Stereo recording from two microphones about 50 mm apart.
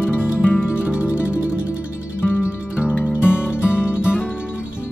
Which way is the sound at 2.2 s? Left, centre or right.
Left.